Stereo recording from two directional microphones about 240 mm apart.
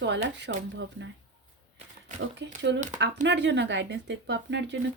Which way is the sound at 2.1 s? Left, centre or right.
Right.